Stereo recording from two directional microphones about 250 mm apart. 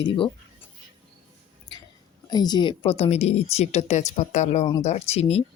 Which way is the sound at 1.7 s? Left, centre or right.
Centre.